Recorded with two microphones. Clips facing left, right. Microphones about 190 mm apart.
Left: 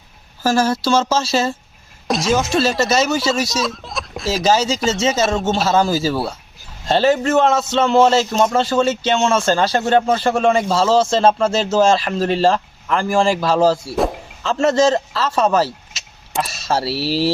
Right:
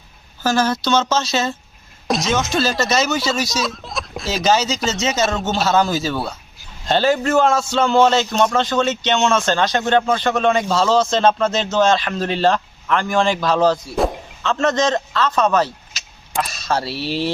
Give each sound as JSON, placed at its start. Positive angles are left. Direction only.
{"t": 0.4, "sound": "a man's voice", "side_deg": 30}
{"t": 2.0, "sound": "speech", "side_deg": 0}
{"t": 11.7, "sound": "a man's voice", "side_deg": 30}
{"t": 11.9, "sound": "speech", "side_deg": 0}
{"t": 13.1, "sound": "speech", "side_deg": 30}
{"t": 13.4, "sound": "speech", "side_deg": 5}
{"t": 14.4, "sound": "a man's voice", "side_deg": 30}
{"t": 15.6, "sound": "vehicle", "side_deg": 0}
{"t": 17.0, "sound": "speech", "side_deg": 5}